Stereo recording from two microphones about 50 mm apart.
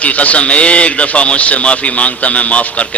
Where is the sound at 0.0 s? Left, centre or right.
Left.